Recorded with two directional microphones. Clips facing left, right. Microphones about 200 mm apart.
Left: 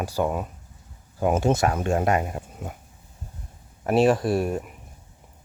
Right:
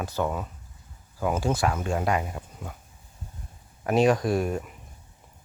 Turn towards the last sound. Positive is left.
turn(degrees=5)  # may be behind; listen again after turning